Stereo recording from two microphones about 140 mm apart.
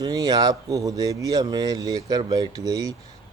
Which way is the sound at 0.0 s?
25° right (ahead or behind).